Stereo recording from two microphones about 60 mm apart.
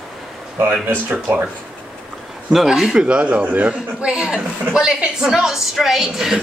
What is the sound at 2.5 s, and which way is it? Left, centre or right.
A man's voice, centre.